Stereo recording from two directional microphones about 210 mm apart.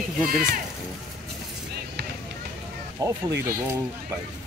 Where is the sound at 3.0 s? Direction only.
15° right (ahead or behind).